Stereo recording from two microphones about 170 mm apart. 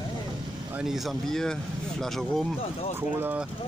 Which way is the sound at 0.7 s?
Centre (ahead or behind).